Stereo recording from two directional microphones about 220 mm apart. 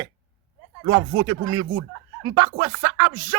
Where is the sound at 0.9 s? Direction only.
20° right (ahead or behind).